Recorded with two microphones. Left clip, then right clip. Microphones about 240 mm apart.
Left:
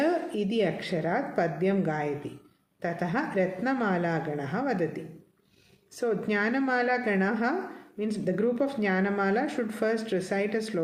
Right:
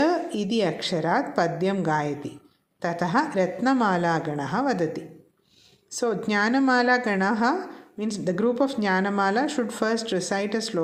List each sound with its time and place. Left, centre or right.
0.0 s speech: right